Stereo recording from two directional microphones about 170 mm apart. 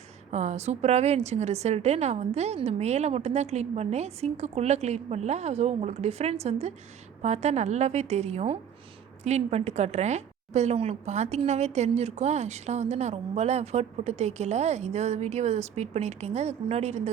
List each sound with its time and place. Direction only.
0.3 s a woman's voice: 40° right (ahead or behind)